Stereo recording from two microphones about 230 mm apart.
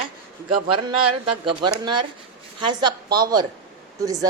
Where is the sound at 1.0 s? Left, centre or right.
Right.